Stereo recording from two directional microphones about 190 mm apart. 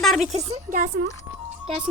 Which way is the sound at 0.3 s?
35° right (ahead or behind).